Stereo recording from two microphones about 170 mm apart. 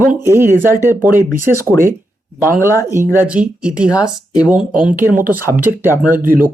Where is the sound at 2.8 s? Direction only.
15° right (ahead or behind).